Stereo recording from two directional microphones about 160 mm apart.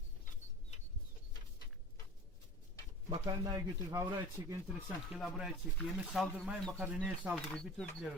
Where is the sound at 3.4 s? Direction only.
20° right (ahead or behind).